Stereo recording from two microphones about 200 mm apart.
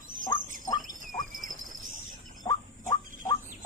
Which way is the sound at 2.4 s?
25° left (ahead or behind).